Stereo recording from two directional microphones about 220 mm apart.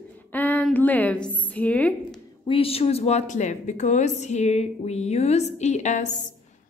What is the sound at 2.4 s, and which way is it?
Speech, 25° left (ahead or behind).